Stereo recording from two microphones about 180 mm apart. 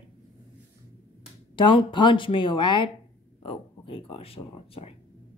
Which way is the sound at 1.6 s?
25° left (ahead or behind).